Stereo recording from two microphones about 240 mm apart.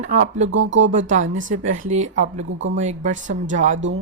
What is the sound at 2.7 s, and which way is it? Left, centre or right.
Speech, right.